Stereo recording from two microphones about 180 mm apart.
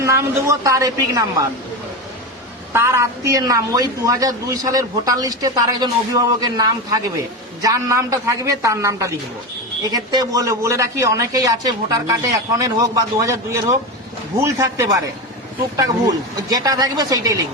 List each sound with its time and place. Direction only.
0.0 s a man's voice: 15° right (ahead or behind)
2.7 s a man's voice: 15° right (ahead or behind)